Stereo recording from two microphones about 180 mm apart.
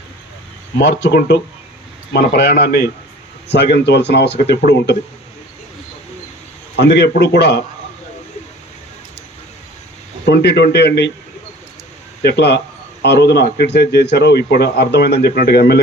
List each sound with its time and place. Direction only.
1.0 s a man's voice: 65° left (ahead or behind)
6.7 s speech: 70° left (ahead or behind)
10.2 s speech: 70° left (ahead or behind)
12.2 s a man's voice: 65° left (ahead or behind)